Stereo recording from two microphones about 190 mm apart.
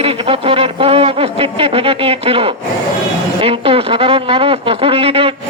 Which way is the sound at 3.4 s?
30° right (ahead or behind).